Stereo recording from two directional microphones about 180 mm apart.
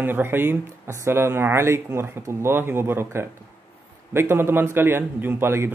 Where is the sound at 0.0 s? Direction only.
10° right (ahead or behind).